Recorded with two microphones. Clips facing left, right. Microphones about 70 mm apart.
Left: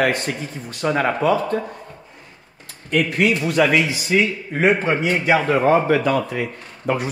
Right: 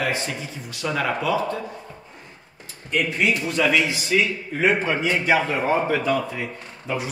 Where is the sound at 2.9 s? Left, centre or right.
Left.